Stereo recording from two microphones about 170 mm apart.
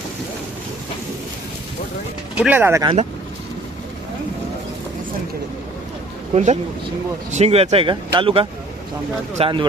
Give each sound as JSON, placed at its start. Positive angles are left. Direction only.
{"t": 2.4, "sound": "speech", "side_deg": -10}
{"t": 6.3, "sound": "speech", "side_deg": -40}